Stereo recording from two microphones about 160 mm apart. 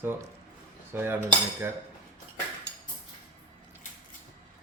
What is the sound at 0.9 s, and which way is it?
Cutlery, 15° right (ahead or behind).